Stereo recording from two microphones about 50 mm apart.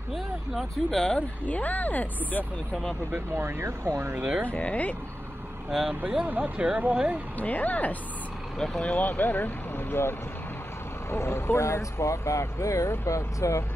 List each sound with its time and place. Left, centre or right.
0.8 s speech: centre
1.5 s speech: left
3.3 s speech: right
3.8 s speech: right
4.5 s speech: left
5.7 s speech: centre
6.2 s speech: right
7.3 s speech: left
8.5 s speech: centre
8.8 s speech: left
11.1 s speech: left